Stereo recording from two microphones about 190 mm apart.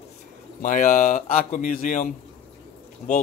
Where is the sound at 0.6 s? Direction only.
45° left (ahead or behind).